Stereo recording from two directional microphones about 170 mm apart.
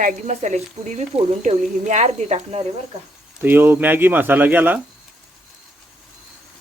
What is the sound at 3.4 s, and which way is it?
Speech, 10° right (ahead or behind).